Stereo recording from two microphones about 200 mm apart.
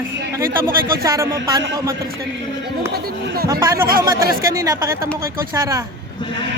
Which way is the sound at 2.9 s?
50° right (ahead or behind).